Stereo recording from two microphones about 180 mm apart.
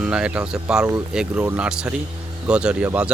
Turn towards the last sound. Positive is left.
turn(degrees=-5)  # may be behind; listen again after turning